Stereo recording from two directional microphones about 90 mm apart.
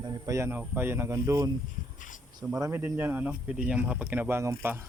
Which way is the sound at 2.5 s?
35° right (ahead or behind).